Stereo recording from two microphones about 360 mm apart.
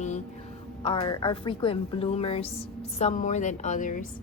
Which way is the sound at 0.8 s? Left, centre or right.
Centre.